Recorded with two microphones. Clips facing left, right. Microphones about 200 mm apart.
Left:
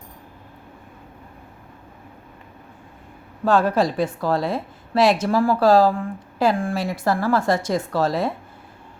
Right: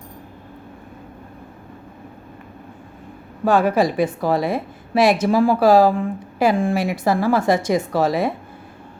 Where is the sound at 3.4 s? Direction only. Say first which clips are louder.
Right 2 dB; 15° right (ahead or behind).